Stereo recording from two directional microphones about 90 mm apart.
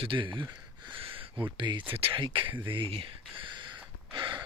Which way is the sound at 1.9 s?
80° right.